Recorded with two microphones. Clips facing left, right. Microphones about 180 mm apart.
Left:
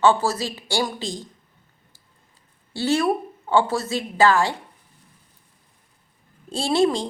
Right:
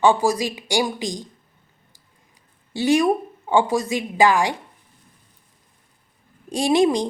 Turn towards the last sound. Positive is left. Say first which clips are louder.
# right 3 dB
turn(degrees=-15)  # may be behind; listen again after turning